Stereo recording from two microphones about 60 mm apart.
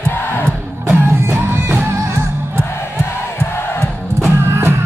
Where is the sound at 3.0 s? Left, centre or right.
Left.